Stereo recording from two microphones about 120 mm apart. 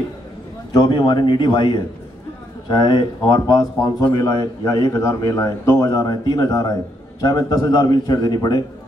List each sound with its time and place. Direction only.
0.7 s a man's voice: 40° left (ahead or behind)